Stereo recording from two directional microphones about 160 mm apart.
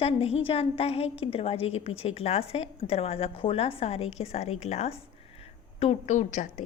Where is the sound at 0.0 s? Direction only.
40° left (ahead or behind).